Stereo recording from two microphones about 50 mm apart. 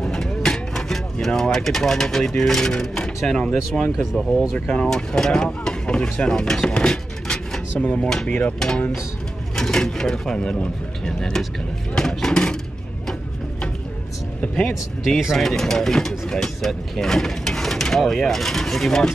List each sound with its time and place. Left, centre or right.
0.0 s vehicle: centre
1.2 s speech: centre
3.9 s speech: centre
4.6 s speech: left
4.8 s speech: centre
8.3 s speech: left
8.5 s speech: centre
14.7 s speech: centre